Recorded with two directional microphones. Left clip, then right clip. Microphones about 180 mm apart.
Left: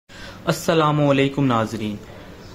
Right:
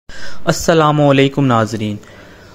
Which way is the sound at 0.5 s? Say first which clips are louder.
Right 6 dB; 35° right (ahead or behind).